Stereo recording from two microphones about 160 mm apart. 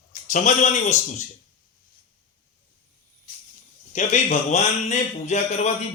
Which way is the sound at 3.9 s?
45° left (ahead or behind).